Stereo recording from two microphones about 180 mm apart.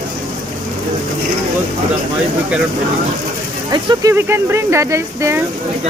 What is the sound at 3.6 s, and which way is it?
Speech, 20° right (ahead or behind).